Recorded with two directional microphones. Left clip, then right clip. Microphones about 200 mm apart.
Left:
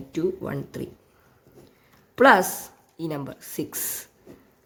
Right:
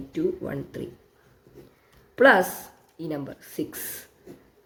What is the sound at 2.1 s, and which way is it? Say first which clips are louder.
Speech: left 1 dB; 40° left (ahead or behind).